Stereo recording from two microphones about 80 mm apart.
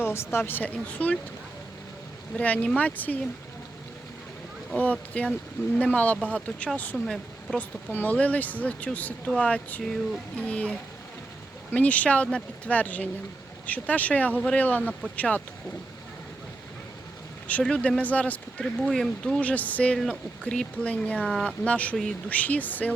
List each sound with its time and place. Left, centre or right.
0.0 s speech: left
2.3 s speech: centre
4.8 s speech: centre
6.9 s speech: centre
7.9 s speech: centre
17.6 s speech: centre
18.6 s speech: centre; by 23.0 s left